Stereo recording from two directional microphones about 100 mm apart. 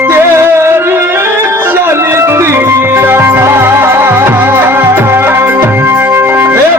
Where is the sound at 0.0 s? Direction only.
25° right (ahead or behind).